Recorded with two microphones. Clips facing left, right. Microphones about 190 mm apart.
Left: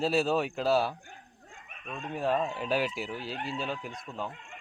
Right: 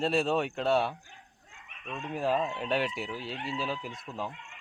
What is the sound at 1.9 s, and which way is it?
Speech, centre (ahead or behind).